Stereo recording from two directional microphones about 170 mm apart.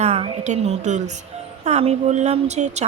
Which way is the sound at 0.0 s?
40° right (ahead or behind).